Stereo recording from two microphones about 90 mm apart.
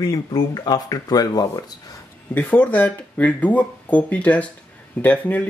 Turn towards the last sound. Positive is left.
turn(degrees=15)  # may be behind; listen again after turning